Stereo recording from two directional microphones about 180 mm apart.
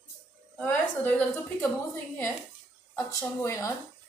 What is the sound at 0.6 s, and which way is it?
A woman's voice, 5° left (ahead or behind).